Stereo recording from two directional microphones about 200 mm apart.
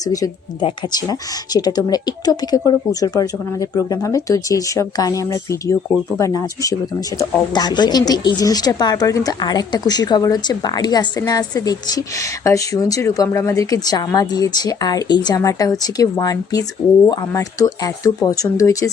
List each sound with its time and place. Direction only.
0.0 s speech: 20° left (ahead or behind)